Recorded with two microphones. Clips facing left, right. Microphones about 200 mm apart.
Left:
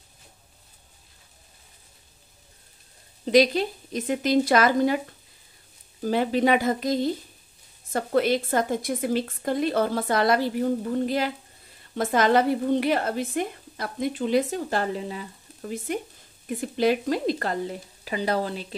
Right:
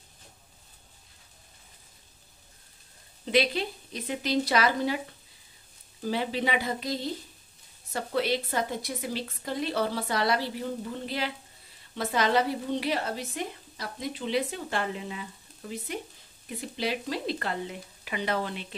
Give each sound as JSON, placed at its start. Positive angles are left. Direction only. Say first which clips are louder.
{"t": 3.3, "sound": "a woman's voice", "louder": "left 7 dB", "side_deg": 40}
{"t": 6.0, "sound": "a woman's voice", "louder": "left 7 dB", "side_deg": 50}
{"t": 15.6, "sound": "a woman's voice", "louder": "left 6 dB", "side_deg": 50}